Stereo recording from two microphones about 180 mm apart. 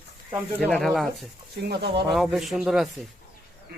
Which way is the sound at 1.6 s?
60° right (ahead or behind).